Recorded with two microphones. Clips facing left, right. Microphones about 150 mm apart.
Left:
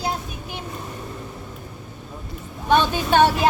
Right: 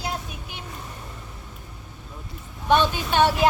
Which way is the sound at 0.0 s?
40° left (ahead or behind).